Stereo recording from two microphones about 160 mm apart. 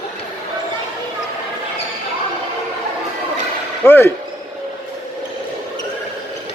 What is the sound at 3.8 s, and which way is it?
Speech, 15° left (ahead or behind).